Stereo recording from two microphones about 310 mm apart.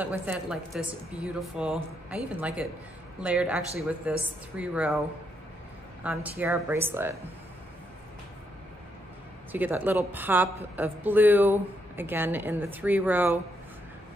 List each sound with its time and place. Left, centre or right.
0.0 s a woman's voice: centre
6.0 s a woman's voice: centre
9.5 s a woman's voice: centre